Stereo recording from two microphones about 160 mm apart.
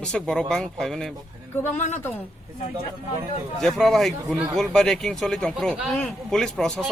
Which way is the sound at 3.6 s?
Centre (ahead or behind).